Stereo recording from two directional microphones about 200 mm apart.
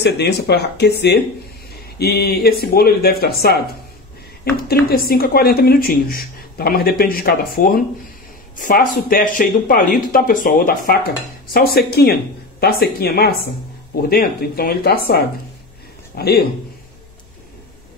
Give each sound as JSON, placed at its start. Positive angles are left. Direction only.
{"t": 0.0, "sound": "speech", "side_deg": 55}
{"t": 1.7, "sound": "a sound", "side_deg": 50}
{"t": 2.6, "sound": "speech", "side_deg": 50}
{"t": 4.6, "sound": "speech", "side_deg": 50}